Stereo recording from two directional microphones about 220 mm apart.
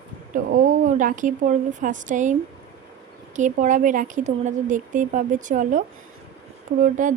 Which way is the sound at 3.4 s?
35° right (ahead or behind).